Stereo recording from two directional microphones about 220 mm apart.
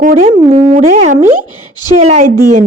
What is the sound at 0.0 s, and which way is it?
A woman's voice, 35° right (ahead or behind).